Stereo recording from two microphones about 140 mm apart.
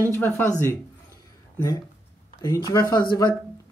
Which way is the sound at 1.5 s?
25° left (ahead or behind).